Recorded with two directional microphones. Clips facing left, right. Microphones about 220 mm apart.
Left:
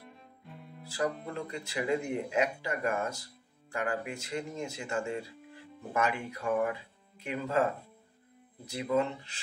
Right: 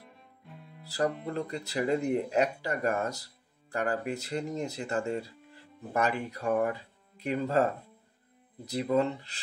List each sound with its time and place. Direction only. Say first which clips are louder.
0.8 s speech: right 3 dB; 35° right (ahead or behind)
8.6 s speech: right 3 dB; 35° right (ahead or behind)